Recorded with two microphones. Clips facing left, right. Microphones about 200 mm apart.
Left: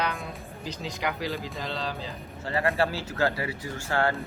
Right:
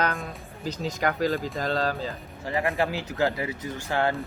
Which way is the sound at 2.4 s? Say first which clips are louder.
Even; 15° right (ahead or behind).